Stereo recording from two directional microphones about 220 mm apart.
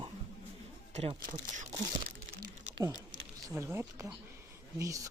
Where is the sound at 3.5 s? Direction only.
10° right (ahead or behind).